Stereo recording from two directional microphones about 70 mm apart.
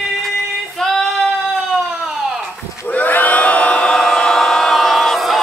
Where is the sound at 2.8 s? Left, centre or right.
Left.